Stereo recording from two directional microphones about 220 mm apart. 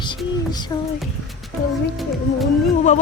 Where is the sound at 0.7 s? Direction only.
15° left (ahead or behind).